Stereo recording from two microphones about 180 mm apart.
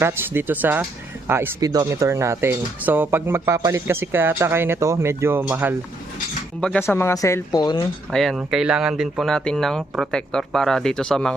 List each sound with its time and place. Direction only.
0.0 s speech: 10° right (ahead or behind)
6.6 s speech: 5° left (ahead or behind); by 7.9 s 25° left (ahead or behind)
8.1 s speech: centre (ahead or behind)